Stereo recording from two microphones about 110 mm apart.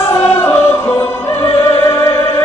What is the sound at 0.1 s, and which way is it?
Music, 20° left (ahead or behind).